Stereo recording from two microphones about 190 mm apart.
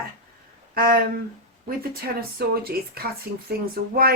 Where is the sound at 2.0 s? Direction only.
55° right (ahead or behind).